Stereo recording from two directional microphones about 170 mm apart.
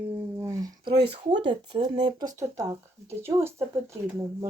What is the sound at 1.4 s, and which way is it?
Speech, 25° right (ahead or behind).